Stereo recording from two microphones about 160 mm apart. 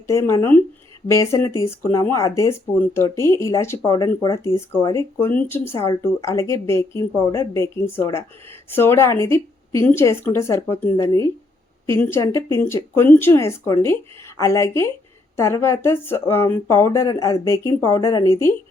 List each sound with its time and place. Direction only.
0.1 s speech: 20° left (ahead or behind)